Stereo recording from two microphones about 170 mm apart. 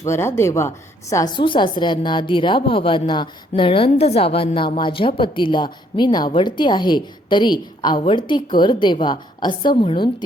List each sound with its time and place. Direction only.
0.0 s speech: 15° left (ahead or behind)
1.1 s a woman's voice: 25° left (ahead or behind)